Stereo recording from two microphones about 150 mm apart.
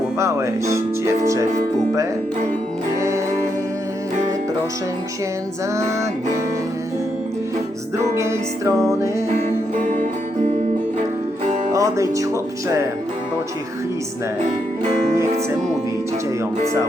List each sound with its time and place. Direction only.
0.2 s speech: 20° right (ahead or behind)
8.1 s speech: 20° right (ahead or behind)
9.7 s music: 55° right (ahead or behind)
11.7 s music: 20° right (ahead or behind)